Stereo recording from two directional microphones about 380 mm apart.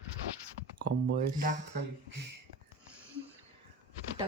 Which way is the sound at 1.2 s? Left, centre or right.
Right.